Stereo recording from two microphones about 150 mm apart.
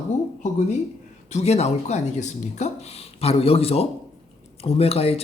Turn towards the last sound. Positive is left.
turn(degrees=45)  # may be behind; listen again after turning